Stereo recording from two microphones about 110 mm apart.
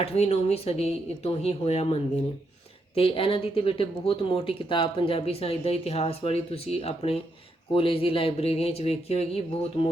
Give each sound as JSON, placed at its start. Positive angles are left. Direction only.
{"t": 0.0, "sound": "speech", "side_deg": 70}